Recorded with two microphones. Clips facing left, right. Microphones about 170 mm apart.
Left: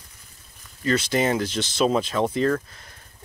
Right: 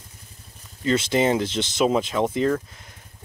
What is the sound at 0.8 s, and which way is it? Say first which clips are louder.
Speech: right 2 dB; 20° right (ahead or behind).